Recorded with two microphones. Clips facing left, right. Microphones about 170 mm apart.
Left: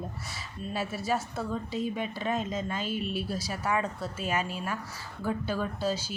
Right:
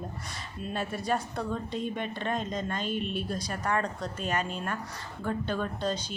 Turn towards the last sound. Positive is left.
turn(degrees=5)  # may be behind; listen again after turning